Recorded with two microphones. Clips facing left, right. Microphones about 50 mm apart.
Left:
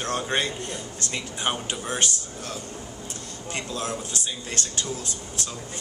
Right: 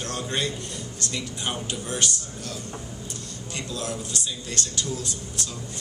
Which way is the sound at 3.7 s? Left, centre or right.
Left.